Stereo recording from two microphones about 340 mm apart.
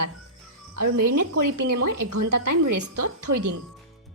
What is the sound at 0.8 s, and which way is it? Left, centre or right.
A woman's voice, right.